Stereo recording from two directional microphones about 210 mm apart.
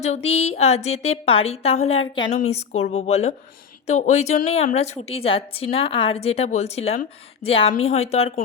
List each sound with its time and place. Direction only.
0.0 s a woman's voice: 30° left (ahead or behind)